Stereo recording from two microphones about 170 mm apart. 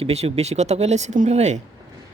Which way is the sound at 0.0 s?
35° right (ahead or behind).